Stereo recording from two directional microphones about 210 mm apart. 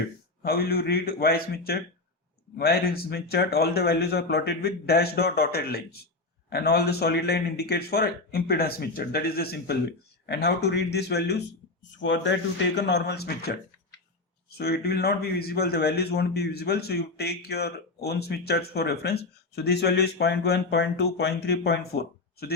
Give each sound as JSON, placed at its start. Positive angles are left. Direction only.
{"t": 0.4, "sound": "speech", "side_deg": 50}
{"t": 14.6, "sound": "speech", "side_deg": 50}